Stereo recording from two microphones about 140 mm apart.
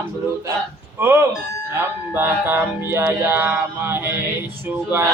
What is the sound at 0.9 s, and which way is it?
Music, 15° right (ahead or behind).